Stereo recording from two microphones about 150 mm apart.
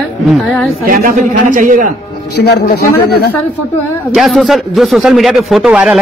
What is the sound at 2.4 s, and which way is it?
Speech, 90° left.